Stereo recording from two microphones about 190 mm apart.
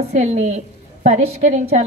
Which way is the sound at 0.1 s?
35° right (ahead or behind).